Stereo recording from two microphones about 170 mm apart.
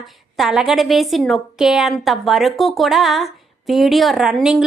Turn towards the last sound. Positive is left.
turn(degrees=-5)  # may be behind; listen again after turning